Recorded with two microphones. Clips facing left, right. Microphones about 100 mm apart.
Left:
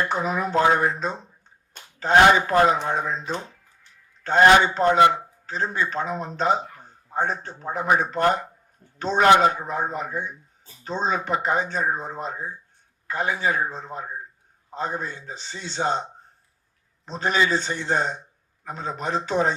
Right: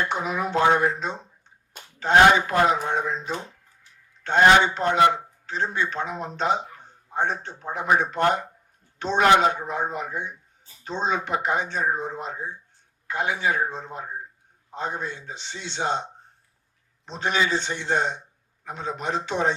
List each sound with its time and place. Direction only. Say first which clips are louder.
0.1 s speech: left 2 dB; 40° left (ahead or behind)
4.2 s speech: left 1 dB; 40° left (ahead or behind)
17.1 s speech: left 2 dB; 40° left (ahead or behind)